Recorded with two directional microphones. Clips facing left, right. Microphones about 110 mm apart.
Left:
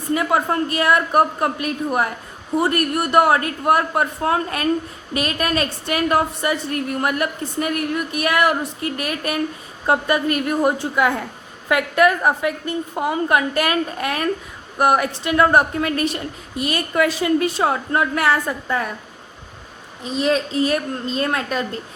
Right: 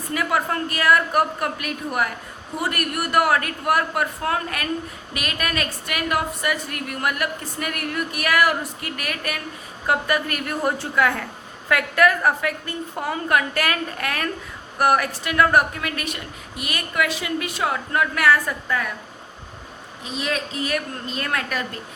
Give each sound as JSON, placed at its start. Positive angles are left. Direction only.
{"t": 0.1, "sound": "a woman's voice", "side_deg": 25}
{"t": 20.1, "sound": "a woman's voice", "side_deg": 30}